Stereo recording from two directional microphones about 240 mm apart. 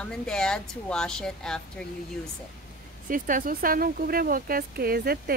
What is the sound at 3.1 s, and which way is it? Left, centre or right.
Speech, right.